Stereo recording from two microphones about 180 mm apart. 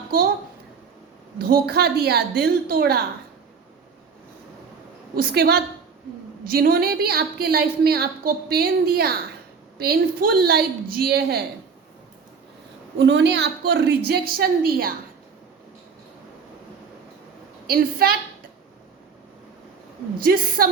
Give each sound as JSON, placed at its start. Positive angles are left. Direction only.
{"t": 1.4, "sound": "a woman's voice", "side_deg": -60}
{"t": 5.1, "sound": "a woman's voice", "side_deg": -60}
{"t": 13.0, "sound": "a woman's voice", "side_deg": -70}
{"t": 17.7, "sound": "a woman's voice", "side_deg": -55}
{"t": 20.1, "sound": "a woman's voice", "side_deg": -55}